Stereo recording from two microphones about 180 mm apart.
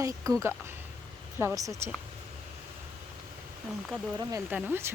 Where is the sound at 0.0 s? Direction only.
20° right (ahead or behind).